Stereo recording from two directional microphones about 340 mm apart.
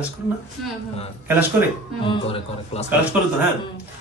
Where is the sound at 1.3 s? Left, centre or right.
Centre.